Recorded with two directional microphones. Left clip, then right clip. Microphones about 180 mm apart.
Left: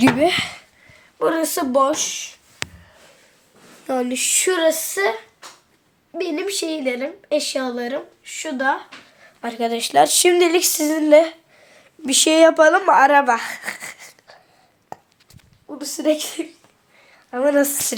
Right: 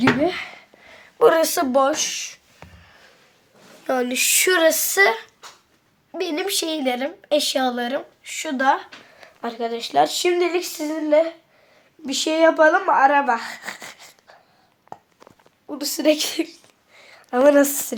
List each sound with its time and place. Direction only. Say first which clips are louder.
0.0 s speech: left 3 dB; 30° left (ahead or behind)
1.2 s a woman's voice: right 5 dB; 40° right (ahead or behind)
1.5 s speech: left 1 dB; 15° right (ahead or behind)
2.0 s speech: even; 90° right
3.8 s speech: right 1 dB; 15° right (ahead or behind)
6.1 s speech: even; 10° right (ahead or behind)
9.6 s speech: left 4 dB; 20° left (ahead or behind)
14.9 s a sound: left 3 dB; 10° left (ahead or behind)
15.6 s speech: right 1 dB; 20° right (ahead or behind)
17.3 s a woman's voice: right 4 dB; 70° right (ahead or behind)